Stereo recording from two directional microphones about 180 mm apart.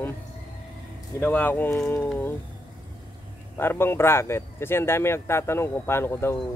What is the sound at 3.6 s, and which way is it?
A man's voice, 10° left (ahead or behind).